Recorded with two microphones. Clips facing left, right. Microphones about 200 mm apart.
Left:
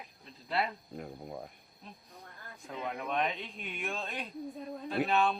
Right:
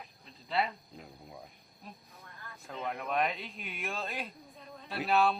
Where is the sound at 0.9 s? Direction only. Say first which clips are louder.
Left 7 dB; 55° left (ahead or behind).